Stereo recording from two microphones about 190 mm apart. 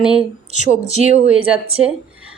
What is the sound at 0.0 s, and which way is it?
Speech, 5° right (ahead or behind).